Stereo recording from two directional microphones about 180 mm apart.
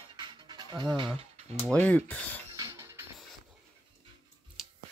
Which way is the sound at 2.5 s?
15° right (ahead or behind).